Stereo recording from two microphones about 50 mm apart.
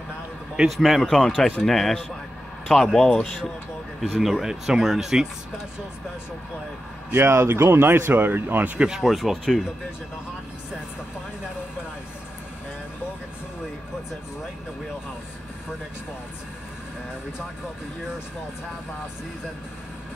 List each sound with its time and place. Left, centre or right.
0.7 s speech: centre
4.0 s speech: centre
7.2 s speech: right
8.7 s speech: centre
9.0 s speech: centre